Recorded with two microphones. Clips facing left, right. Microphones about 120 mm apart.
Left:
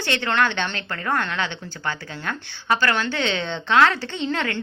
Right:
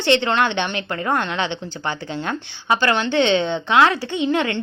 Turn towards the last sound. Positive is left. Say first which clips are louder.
# right 5 dB
turn(degrees=-20)  # may be behind; listen again after turning